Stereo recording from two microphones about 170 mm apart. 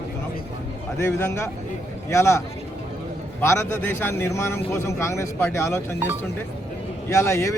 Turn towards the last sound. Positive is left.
turn(degrees=15)  # may be behind; listen again after turning